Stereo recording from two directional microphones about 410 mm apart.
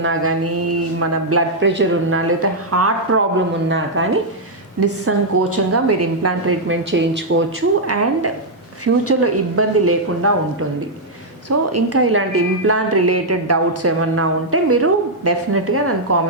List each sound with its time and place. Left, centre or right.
0.0 s a woman's voice: right